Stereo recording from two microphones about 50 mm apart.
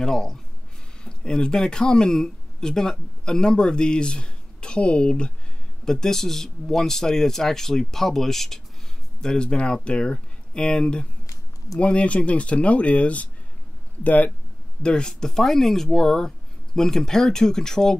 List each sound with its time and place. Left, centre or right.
0.0 s speech: centre
5.9 s speech: centre; by 14.3 s left
14.8 s speech: centre